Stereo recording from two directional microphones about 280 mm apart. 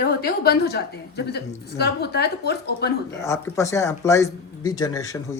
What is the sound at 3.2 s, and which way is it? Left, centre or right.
Speech, centre.